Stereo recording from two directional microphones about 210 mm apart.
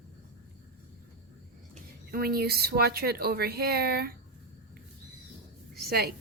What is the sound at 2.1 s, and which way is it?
A woman's voice, 45° right (ahead or behind).